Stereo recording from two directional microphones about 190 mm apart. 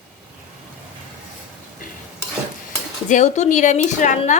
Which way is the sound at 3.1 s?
40° left (ahead or behind).